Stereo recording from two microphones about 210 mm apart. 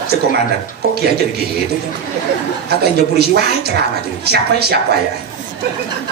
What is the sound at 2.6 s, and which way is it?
A woman's voice, 50° right (ahead or behind).